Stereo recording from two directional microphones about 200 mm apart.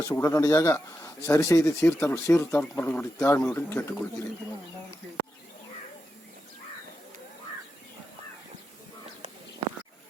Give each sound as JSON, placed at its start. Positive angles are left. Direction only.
{"t": 0.0, "sound": "speech", "side_deg": 15}